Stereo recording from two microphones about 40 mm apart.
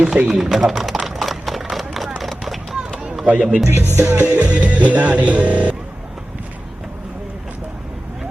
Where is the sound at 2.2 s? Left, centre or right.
Centre.